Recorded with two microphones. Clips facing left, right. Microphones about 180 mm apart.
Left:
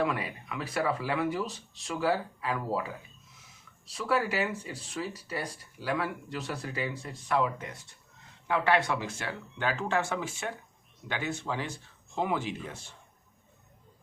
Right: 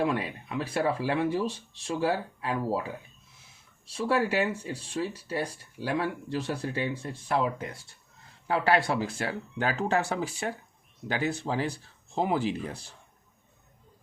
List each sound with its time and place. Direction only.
0.0 s speech: 30° right (ahead or behind)